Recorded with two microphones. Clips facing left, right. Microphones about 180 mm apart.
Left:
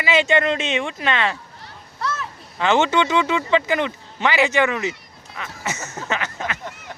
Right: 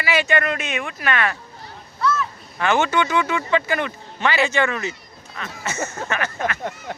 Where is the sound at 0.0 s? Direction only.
20° left (ahead or behind).